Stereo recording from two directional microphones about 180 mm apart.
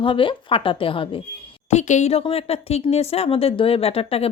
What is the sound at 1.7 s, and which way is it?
Speech, 40° left (ahead or behind).